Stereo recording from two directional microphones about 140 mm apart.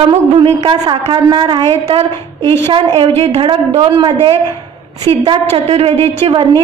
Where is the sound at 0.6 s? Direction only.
35° right (ahead or behind).